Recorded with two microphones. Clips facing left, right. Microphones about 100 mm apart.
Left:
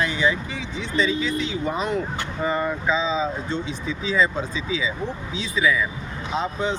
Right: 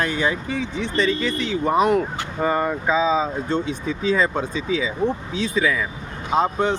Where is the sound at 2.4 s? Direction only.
45° right (ahead or behind).